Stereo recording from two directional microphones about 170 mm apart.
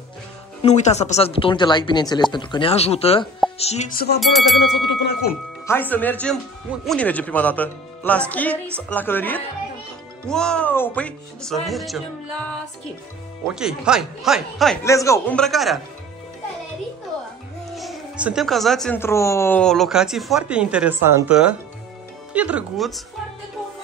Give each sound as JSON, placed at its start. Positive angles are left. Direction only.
{"t": 0.6, "sound": "speech", "side_deg": 40}
{"t": 4.2, "sound": "speech", "side_deg": 0}
{"t": 5.7, "sound": "speech", "side_deg": 10}
{"t": 13.5, "sound": "speech", "side_deg": -5}
{"t": 14.8, "sound": "speech", "side_deg": 15}
{"t": 15.3, "sound": "speech", "side_deg": 0}
{"t": 17.7, "sound": "music", "side_deg": -5}
{"t": 18.9, "sound": "speech", "side_deg": 15}
{"t": 19.6, "sound": "speech", "side_deg": 0}